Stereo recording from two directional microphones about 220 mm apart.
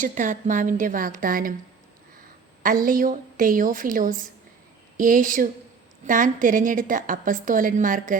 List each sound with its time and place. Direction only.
0.0 s a woman's voice: 35° right (ahead or behind)
2.6 s a woman's voice: 40° right (ahead or behind)